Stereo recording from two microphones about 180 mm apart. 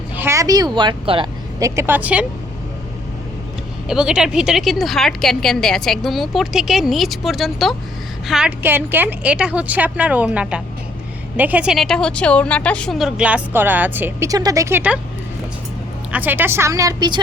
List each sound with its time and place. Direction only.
0.2 s speech: 15° right (ahead or behind)
1.5 s speech: 15° right (ahead or behind)
3.8 s a woman's voice: 5° right (ahead or behind)
16.1 s speech: 10° right (ahead or behind)